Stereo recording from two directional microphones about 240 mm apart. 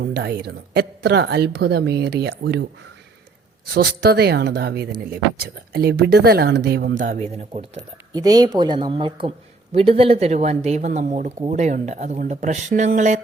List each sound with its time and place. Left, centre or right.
0.0 s a woman's voice: right
3.8 s a woman's voice: right
8.1 s speech: centre; by 13.2 s right